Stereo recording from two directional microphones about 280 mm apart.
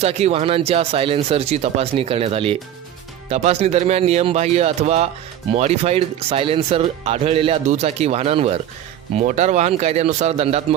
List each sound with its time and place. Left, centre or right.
0.0 s speech: right